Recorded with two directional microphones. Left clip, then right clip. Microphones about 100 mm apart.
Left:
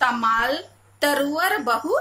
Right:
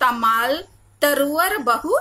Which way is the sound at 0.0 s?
25° right (ahead or behind).